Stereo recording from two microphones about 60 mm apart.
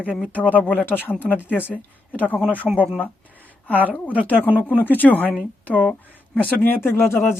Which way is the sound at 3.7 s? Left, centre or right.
Left.